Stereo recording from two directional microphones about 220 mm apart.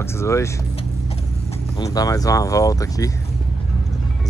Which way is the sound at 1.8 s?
15° left (ahead or behind).